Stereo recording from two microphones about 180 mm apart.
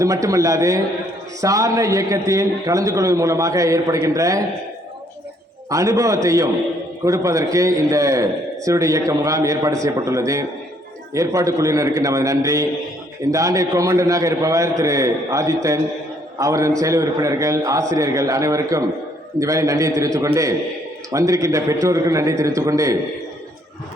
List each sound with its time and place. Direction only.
0.0 s a man's voice: 20° right (ahead or behind)
5.6 s a man's voice: 20° right (ahead or behind)